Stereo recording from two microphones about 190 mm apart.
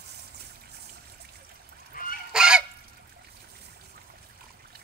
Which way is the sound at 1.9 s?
45° left (ahead or behind).